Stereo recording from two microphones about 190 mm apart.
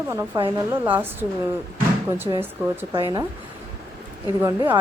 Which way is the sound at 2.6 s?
10° right (ahead or behind).